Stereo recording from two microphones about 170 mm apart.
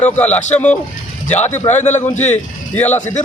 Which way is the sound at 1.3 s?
40° left (ahead or behind).